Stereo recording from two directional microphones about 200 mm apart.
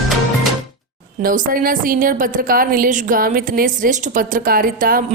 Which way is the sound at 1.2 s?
45° right (ahead or behind).